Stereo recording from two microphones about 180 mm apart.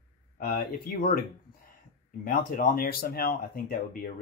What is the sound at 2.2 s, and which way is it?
Speech, 50° left (ahead or behind).